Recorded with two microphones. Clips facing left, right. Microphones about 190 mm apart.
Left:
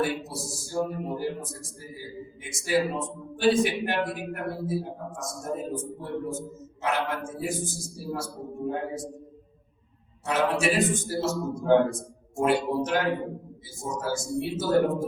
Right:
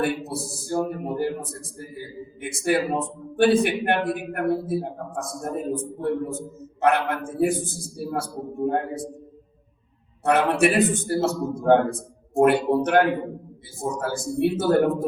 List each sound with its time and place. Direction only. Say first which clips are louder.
0.0 s a man's voice: right 3 dB; 60° right (ahead or behind)
10.2 s a man's voice: right 5 dB; 60° right (ahead or behind)